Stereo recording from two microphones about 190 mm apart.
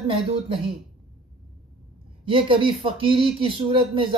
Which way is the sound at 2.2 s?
25° right (ahead or behind).